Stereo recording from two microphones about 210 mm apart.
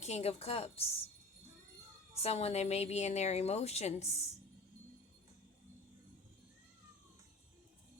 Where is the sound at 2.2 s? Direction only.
30° left (ahead or behind).